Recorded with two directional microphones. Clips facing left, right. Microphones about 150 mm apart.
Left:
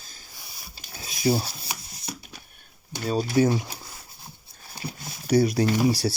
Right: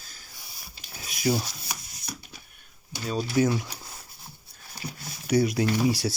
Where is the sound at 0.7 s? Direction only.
25° left (ahead or behind).